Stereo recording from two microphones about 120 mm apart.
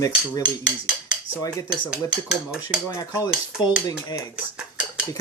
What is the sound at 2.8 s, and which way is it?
Speech, 30° left (ahead or behind).